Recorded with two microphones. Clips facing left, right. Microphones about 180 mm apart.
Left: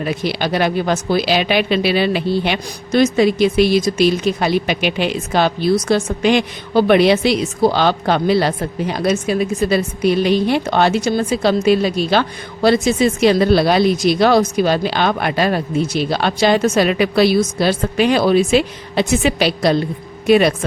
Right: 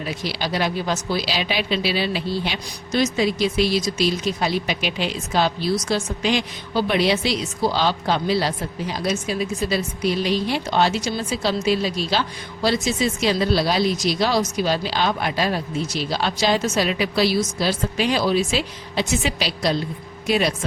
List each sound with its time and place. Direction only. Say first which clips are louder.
0.0 s speech: left 7 dB; 60° left (ahead or behind)